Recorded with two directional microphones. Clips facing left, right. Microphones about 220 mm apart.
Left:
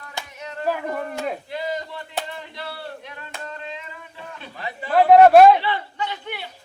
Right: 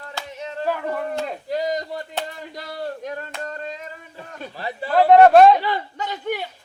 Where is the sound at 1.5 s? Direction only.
40° right (ahead or behind).